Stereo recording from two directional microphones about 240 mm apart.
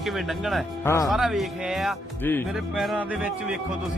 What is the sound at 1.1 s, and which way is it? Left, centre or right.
Speech, centre.